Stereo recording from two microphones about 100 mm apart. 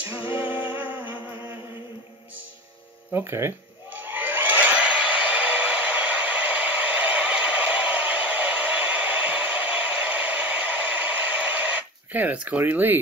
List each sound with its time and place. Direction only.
0.0 s a capella: 20° right (ahead or behind)
3.1 s a sound: 25° right (ahead or behind)
10.7 s hair dryer: 15° right (ahead or behind)
12.1 s speech: 15° right (ahead or behind)